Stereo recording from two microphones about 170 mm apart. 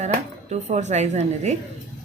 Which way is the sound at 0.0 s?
45° right (ahead or behind).